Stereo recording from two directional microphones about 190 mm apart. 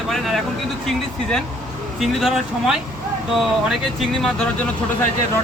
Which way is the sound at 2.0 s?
Centre (ahead or behind).